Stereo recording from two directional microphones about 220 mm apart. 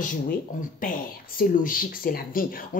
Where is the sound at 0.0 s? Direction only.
40° left (ahead or behind).